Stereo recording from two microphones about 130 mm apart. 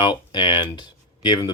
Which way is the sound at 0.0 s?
35° left (ahead or behind).